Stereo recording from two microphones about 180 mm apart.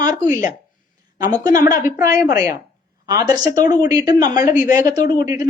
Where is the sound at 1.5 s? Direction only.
20° right (ahead or behind).